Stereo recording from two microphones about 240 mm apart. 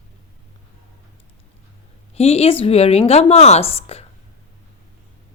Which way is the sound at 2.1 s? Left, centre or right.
Left.